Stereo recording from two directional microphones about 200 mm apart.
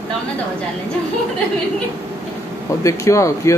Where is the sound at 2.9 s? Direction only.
15° left (ahead or behind).